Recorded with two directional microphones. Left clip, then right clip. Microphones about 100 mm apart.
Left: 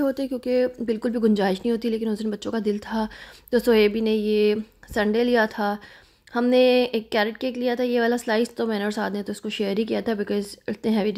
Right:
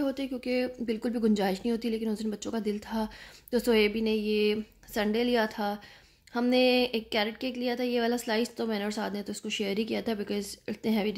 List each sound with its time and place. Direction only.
0.0 s speech: 65° left (ahead or behind)
0.5 s a woman's voice: 30° left (ahead or behind)